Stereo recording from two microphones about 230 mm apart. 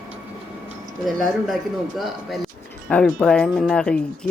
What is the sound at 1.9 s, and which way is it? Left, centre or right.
Speech, centre.